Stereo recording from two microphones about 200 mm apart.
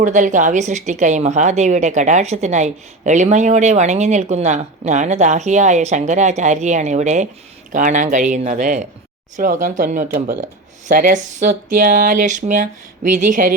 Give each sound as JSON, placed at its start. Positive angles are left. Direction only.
{"t": 0.0, "sound": "a woman's voice", "side_deg": -40}